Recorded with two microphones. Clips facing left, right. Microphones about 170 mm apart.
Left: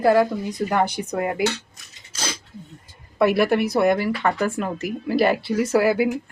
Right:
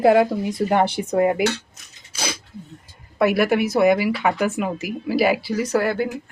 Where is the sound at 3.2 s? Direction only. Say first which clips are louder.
Even; 5° right (ahead or behind).